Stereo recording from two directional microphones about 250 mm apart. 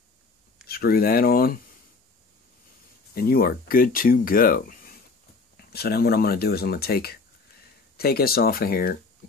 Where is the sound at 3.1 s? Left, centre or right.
Left.